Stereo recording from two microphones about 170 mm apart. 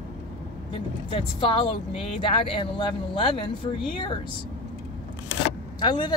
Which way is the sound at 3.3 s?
30° left (ahead or behind).